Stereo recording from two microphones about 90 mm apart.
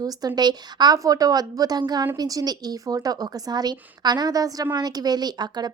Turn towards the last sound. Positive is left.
turn(degrees=-50)  # may be behind; listen again after turning